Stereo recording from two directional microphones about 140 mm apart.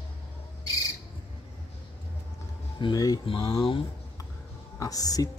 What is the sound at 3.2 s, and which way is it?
Speech, 40° left (ahead or behind).